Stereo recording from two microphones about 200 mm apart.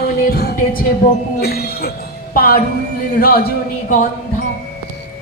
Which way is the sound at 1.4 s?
50° left (ahead or behind).